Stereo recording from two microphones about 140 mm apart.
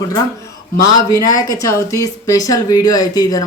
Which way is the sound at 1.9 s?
25° left (ahead or behind).